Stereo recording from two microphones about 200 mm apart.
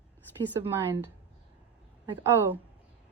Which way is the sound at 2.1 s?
15° right (ahead or behind).